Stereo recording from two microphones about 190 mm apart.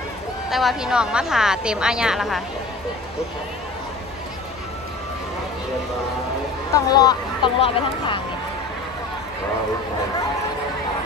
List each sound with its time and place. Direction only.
0.5 s a woman's voice: centre (ahead or behind)
6.7 s speech: 20° left (ahead or behind)